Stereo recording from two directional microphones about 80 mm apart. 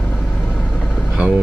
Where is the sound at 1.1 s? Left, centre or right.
Centre.